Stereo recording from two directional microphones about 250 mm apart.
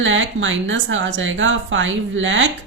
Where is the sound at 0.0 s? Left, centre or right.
Right.